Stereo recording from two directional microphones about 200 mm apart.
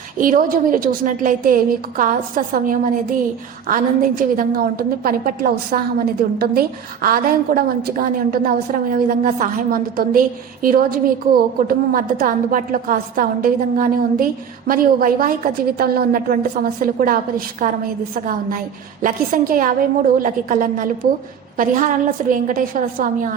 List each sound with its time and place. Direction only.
0.2 s a woman's voice: 45° right (ahead or behind)